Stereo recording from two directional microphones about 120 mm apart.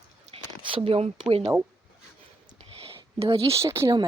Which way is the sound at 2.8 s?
50° right (ahead or behind).